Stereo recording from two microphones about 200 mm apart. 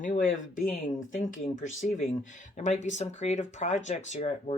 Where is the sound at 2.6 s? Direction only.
35° left (ahead or behind).